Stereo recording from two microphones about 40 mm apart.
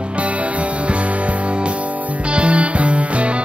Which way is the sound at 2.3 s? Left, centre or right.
Right.